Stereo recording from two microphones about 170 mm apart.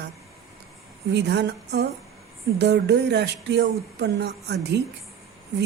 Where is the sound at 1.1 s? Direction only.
90° right.